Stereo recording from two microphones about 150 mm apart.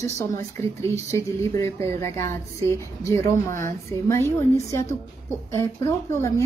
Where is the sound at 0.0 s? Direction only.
20° left (ahead or behind).